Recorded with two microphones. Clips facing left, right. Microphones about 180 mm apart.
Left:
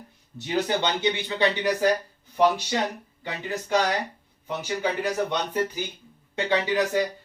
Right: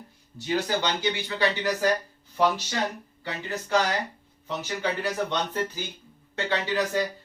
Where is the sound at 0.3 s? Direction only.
20° left (ahead or behind).